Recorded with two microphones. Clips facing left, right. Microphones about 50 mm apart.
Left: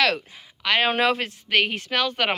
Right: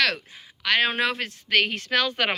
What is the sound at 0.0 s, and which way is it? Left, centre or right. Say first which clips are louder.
Speech: left 2 dB; left.